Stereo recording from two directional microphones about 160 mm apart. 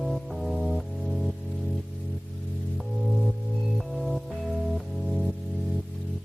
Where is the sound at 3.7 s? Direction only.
Centre (ahead or behind).